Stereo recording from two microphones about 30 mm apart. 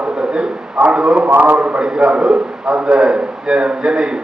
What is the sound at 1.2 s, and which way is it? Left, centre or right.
Speech, right.